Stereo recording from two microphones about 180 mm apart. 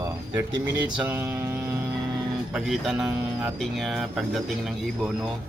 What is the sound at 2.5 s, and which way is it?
Speech, 5° right (ahead or behind).